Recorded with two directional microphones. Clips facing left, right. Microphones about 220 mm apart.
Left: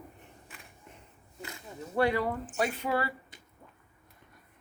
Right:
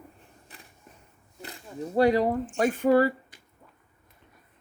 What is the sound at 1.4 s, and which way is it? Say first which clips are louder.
Speech: right 6 dB; 35° right (ahead or behind).